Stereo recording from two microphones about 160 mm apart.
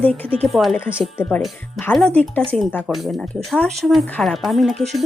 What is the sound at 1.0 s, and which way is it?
Speech, 10° left (ahead or behind).